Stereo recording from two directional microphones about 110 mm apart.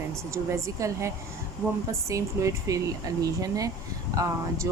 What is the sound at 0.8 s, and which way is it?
Speech, 30° right (ahead or behind).